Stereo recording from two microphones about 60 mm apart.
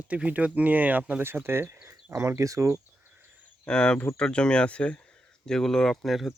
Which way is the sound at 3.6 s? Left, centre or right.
Centre.